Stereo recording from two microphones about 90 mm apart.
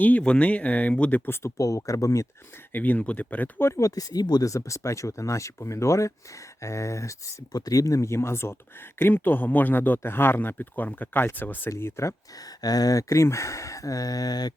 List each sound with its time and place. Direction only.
0.0 s speech: 15° left (ahead or behind)
1.4 s speech: 35° left (ahead or behind)
2.7 s speech: 20° left (ahead or behind)
3.7 s speech: 35° left (ahead or behind)
12.6 s speech: 45° left (ahead or behind)